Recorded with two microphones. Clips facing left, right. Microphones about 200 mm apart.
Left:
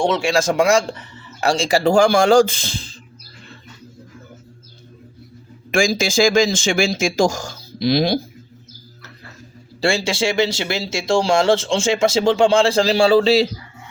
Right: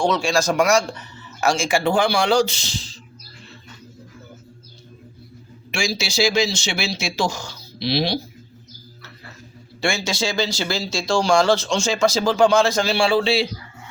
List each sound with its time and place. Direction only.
0.0 s speech: 25° left (ahead or behind); by 2.9 s 55° left (ahead or behind)
5.7 s speech: 50° left (ahead or behind)
9.8 s speech: 30° left (ahead or behind)